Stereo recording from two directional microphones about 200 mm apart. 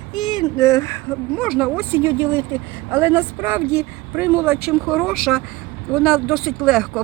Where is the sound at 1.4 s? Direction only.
Centre (ahead or behind).